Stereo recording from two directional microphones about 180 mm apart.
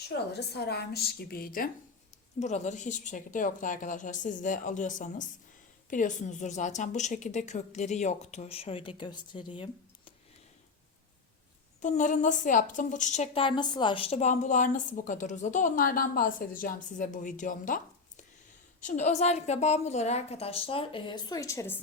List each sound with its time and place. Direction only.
0.3 s a woman's voice: 65° left (ahead or behind)
2.4 s a woman's voice: 40° left (ahead or behind)
11.8 s a woman's voice: 45° left (ahead or behind)
18.8 s a woman's voice: 45° left (ahead or behind); by 21.8 s 15° left (ahead or behind)